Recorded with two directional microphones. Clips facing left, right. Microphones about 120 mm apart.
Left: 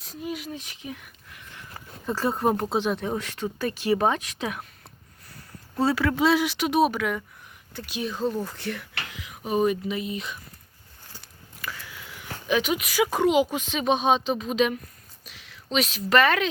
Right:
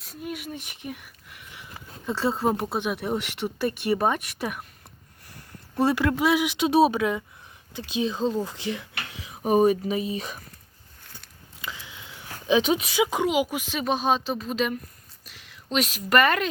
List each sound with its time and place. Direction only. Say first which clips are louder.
0.0 s speech: left 1 dB; centre (ahead or behind)
0.6 s speech: right 1 dB; 60° right (ahead or behind)
0.9 s a sound: right 1 dB; 5° right (ahead or behind)
2.6 s speech: left 2 dB; 10° right (ahead or behind)
5.7 s speech: right 1 dB; 15° right (ahead or behind); by 9.4 s 30° right (ahead or behind)
9.4 s speech: right 4 dB; 40° right (ahead or behind)
11.6 s a sound: left 1 dB; 20° right (ahead or behind)
13.2 s speech: left 3 dB; 10° right (ahead or behind)